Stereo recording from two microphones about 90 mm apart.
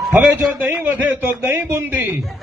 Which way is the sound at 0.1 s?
15° right (ahead or behind).